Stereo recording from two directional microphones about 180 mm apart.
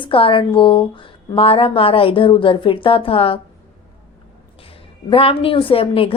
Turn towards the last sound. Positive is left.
turn(degrees=30)  # may be behind; listen again after turning